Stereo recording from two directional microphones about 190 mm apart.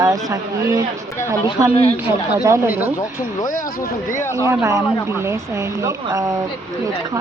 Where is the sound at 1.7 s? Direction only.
30° left (ahead or behind).